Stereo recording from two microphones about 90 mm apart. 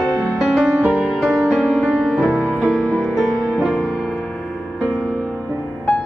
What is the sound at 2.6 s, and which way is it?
Music, 5° left (ahead or behind).